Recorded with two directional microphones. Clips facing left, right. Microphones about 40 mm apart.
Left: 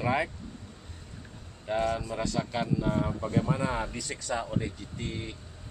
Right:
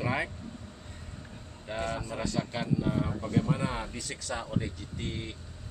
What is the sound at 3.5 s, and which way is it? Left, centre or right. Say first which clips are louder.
Speech: left 2 dB; left.